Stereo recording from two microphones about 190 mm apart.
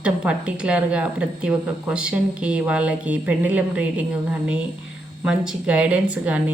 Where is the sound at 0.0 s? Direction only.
5° right (ahead or behind).